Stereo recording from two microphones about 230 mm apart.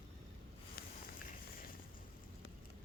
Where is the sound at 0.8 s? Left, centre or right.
Left.